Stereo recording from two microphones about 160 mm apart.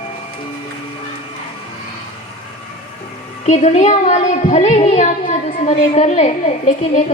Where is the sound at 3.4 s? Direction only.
45° left (ahead or behind).